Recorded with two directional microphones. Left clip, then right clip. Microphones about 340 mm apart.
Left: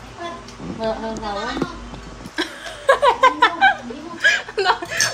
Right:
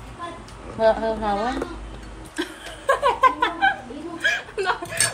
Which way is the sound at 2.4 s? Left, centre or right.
Left.